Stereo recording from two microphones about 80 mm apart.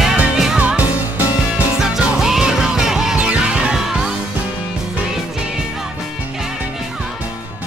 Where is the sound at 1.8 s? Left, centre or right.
Centre.